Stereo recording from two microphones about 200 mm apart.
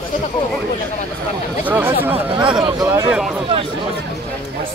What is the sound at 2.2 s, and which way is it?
Speech, 25° right (ahead or behind).